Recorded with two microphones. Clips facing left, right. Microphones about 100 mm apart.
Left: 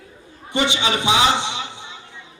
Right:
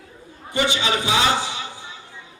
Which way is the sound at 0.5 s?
20° left (ahead or behind).